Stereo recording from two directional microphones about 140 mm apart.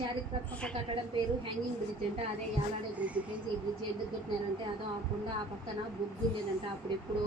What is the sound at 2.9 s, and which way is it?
Speech, 10° right (ahead or behind).